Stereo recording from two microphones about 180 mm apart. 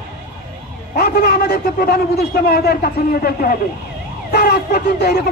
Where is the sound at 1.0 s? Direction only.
60° left (ahead or behind).